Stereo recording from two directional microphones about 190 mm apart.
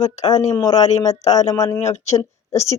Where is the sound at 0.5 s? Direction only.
20° left (ahead or behind).